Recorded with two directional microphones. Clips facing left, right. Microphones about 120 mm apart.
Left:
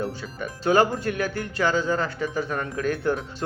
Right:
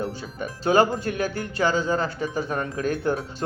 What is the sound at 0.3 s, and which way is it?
Speech, 30° right (ahead or behind).